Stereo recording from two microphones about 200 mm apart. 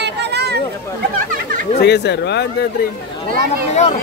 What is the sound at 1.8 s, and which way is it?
Speech, 55° left (ahead or behind).